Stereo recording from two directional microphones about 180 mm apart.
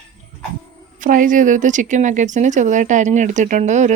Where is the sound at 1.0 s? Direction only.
50° right (ahead or behind).